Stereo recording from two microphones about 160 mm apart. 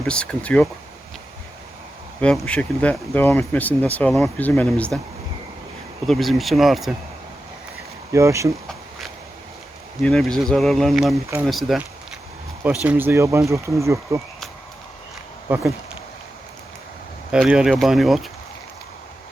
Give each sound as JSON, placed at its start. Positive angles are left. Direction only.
{"t": 0.1, "sound": "speech", "side_deg": 5}
{"t": 2.2, "sound": "speech", "side_deg": 5}
{"t": 6.1, "sound": "speech", "side_deg": 0}
{"t": 8.1, "sound": "speech", "side_deg": -20}
{"t": 10.0, "sound": "speech", "side_deg": 5}
{"t": 12.8, "sound": "speech", "side_deg": -10}
{"t": 15.4, "sound": "speech", "side_deg": -10}
{"t": 17.3, "sound": "speech", "side_deg": -5}